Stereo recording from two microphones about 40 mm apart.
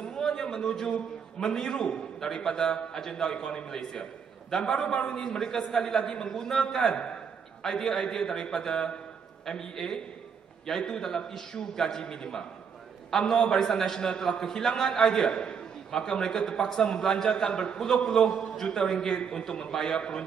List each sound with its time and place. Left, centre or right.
0.1 s a sound: centre
1.4 s a man's voice: centre
11.0 s a man's voice: centre